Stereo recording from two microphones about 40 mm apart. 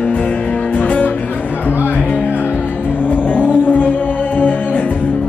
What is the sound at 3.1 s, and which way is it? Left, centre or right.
Music, left.